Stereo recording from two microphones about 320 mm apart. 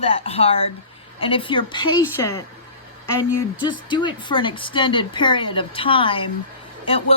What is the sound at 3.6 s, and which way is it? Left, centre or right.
A woman's voice, centre.